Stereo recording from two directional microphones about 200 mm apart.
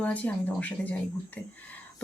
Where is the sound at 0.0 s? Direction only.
5° left (ahead or behind).